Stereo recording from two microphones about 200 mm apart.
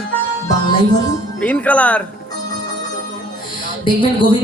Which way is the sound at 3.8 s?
25° left (ahead or behind).